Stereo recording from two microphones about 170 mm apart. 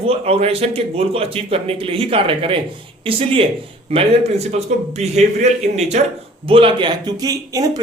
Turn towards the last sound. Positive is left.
turn(degrees=-20)  # may be behind; listen again after turning